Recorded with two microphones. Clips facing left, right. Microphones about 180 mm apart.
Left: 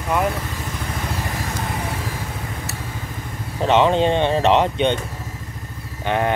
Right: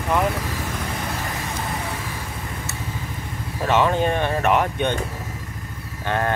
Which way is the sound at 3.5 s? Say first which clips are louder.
Left 3 dB; 20° left (ahead or behind).